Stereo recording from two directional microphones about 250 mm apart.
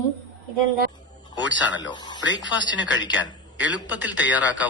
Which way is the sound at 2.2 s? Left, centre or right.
Left.